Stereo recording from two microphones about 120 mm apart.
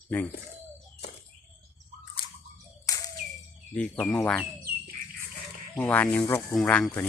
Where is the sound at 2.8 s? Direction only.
30° left (ahead or behind).